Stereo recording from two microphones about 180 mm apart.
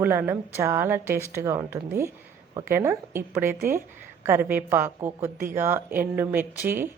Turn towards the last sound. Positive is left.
turn(degrees=-10)  # may be behind; listen again after turning